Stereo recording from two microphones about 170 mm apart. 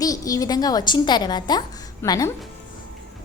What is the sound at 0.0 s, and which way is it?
A woman's voice, 20° left (ahead or behind).